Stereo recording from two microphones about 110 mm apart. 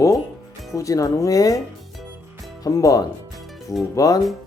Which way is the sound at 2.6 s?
30° left (ahead or behind).